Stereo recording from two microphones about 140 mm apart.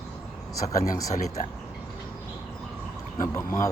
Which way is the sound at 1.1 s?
55° left (ahead or behind).